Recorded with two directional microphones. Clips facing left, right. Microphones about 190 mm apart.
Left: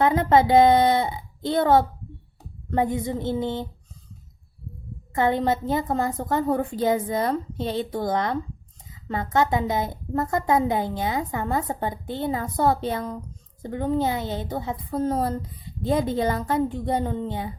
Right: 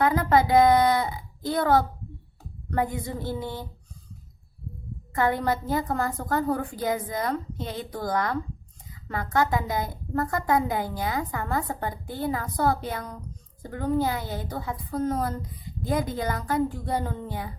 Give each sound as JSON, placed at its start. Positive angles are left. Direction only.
{"t": 0.0, "sound": "a woman's voice", "side_deg": 25}
{"t": 5.1, "sound": "a woman's voice", "side_deg": 25}